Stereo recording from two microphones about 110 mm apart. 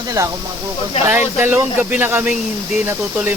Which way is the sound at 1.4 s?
20° right (ahead or behind).